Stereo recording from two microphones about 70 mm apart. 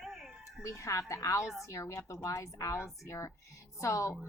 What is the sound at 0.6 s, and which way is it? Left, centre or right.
A woman's voice, left.